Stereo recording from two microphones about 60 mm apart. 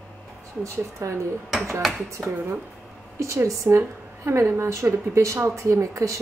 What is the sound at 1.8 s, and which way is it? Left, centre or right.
Speech, centre.